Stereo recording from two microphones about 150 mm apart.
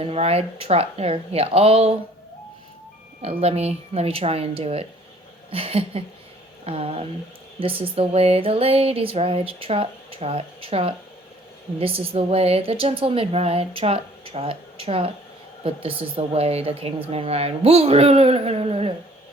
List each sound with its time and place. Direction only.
0.0 s speech: 40° right (ahead or behind)
3.2 s speech: 45° right (ahead or behind)
5.5 s music: 40° right (ahead or behind)